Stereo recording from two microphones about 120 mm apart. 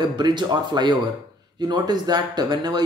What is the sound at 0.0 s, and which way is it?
Speech, 40° right (ahead or behind).